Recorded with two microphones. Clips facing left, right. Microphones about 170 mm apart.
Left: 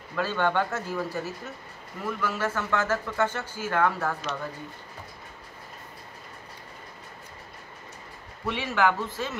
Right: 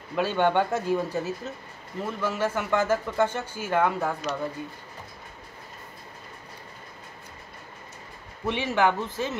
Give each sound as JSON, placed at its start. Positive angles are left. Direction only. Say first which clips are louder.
{"t": 0.1, "sound": "a man's voice", "louder": "right 3 dB", "side_deg": -15}
{"t": 8.5, "sound": "speech", "louder": "right 2 dB", "side_deg": -20}